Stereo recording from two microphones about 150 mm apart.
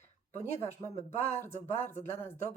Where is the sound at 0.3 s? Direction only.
15° left (ahead or behind).